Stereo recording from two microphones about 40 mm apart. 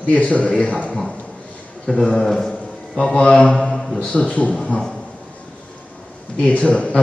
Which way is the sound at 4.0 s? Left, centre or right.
Left.